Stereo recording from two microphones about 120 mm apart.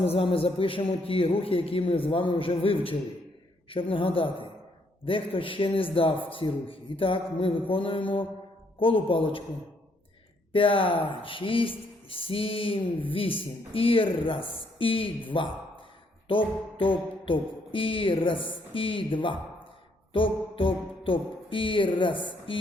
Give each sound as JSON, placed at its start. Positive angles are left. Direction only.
{"t": 0.0, "sound": "speech", "side_deg": 50}
{"t": 10.5, "sound": "speech", "side_deg": 45}